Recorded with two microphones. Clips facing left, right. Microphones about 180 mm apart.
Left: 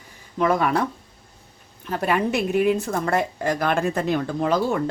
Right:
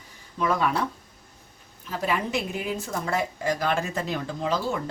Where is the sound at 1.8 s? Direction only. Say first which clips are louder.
Left 5 dB; 60° left (ahead or behind).